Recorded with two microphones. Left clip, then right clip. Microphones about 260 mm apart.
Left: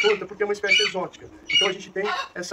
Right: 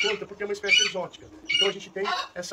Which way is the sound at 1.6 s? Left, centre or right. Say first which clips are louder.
Left 4 dB; centre.